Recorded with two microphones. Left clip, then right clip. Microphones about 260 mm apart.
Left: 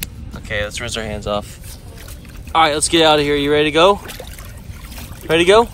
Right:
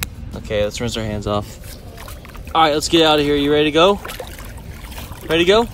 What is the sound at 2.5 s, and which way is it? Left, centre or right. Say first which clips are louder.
Speech: even; centre.